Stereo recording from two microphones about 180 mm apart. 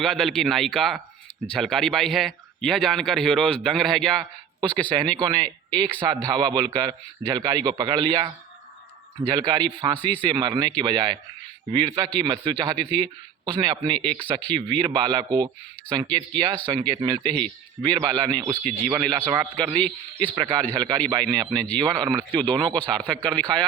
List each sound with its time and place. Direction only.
0.0 s a man's voice: centre (ahead or behind)
4.2 s a man's voice: 25° right (ahead or behind)
19.7 s a man's voice: 10° left (ahead or behind)
20.2 s a man's voice: 25° right (ahead or behind)
22.7 s a man's voice: 5° left (ahead or behind)